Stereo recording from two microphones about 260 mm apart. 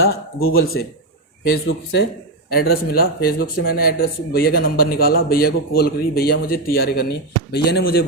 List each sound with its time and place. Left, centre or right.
0.0 s speech: left